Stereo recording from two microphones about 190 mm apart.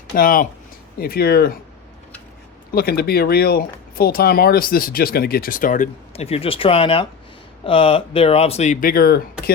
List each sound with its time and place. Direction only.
0.2 s speech: 45° left (ahead or behind)
2.7 s speech: 55° left (ahead or behind)